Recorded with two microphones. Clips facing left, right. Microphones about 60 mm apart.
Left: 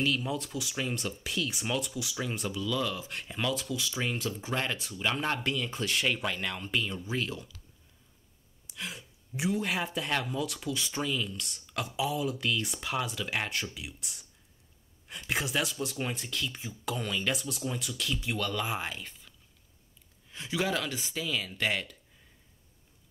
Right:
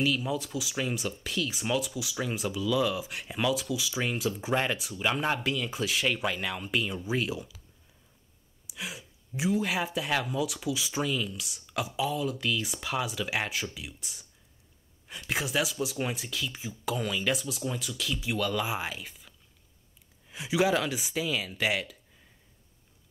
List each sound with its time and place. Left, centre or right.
0.0 s speech: centre
8.6 s speech: centre